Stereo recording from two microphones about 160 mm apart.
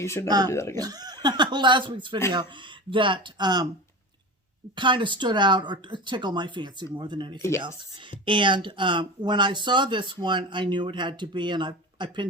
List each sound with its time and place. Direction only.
0.0 s speech: 15° left (ahead or behind)
0.3 s speech: 25° right (ahead or behind)
0.5 s speech: 15° left (ahead or behind)
0.8 s speech: 25° right (ahead or behind)
4.8 s speech: 30° right (ahead or behind)